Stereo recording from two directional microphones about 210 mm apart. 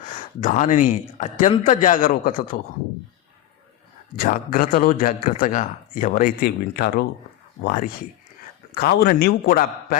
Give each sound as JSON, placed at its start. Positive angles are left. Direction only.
{"t": 0.0, "sound": "speech", "side_deg": 40}
{"t": 4.1, "sound": "a man's voice", "side_deg": 45}